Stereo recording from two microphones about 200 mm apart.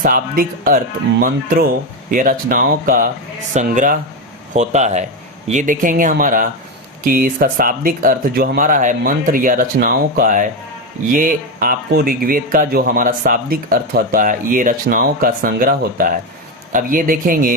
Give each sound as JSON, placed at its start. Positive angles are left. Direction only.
{"t": 0.0, "sound": "speech", "side_deg": -45}